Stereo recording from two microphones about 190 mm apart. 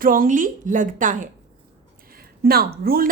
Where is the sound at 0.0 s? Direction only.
45° right (ahead or behind).